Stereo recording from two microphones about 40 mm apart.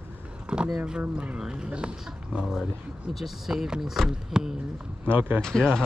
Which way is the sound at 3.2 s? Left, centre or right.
Centre.